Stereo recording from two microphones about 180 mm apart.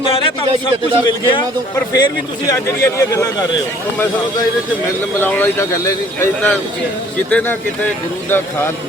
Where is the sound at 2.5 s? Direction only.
15° left (ahead or behind).